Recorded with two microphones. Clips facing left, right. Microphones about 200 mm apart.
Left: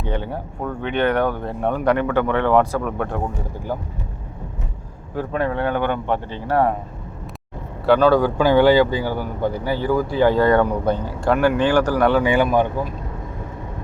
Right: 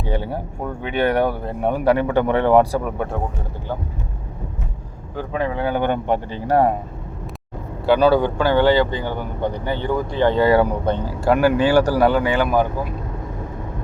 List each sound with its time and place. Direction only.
0.0 s speech: 10° right (ahead or behind)
5.1 s speech: centre (ahead or behind)
5.8 s speech: 15° right (ahead or behind)
7.9 s speech: 5° right (ahead or behind)
8.2 s speech: 15° left (ahead or behind)
10.4 s speech: 5° right (ahead or behind)
12.2 s speech: 10° left (ahead or behind)